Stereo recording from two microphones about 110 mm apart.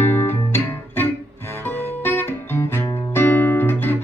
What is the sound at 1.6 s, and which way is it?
Guitar, 20° left (ahead or behind).